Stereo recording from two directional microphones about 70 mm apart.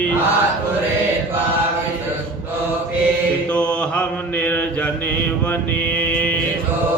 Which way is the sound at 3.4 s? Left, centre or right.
Centre.